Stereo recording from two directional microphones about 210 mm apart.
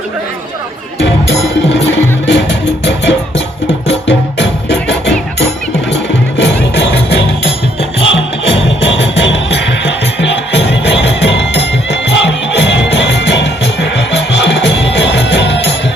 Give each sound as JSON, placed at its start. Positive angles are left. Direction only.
{"t": 2.2, "sound": "music", "side_deg": 55}
{"t": 7.8, "sound": "music", "side_deg": 25}
{"t": 8.8, "sound": "music", "side_deg": 55}